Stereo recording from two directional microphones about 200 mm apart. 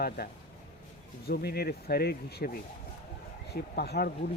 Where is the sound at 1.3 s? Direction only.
50° left (ahead or behind).